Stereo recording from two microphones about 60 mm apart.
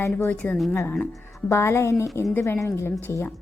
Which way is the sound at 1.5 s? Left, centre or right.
Left.